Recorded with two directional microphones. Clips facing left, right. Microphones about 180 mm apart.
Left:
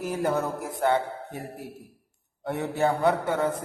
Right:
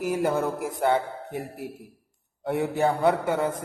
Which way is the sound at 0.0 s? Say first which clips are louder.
Right 2 dB; 10° right (ahead or behind).